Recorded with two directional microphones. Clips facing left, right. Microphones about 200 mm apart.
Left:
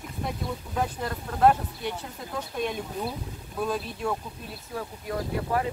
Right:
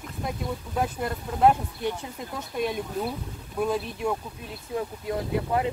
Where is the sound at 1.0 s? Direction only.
10° right (ahead or behind).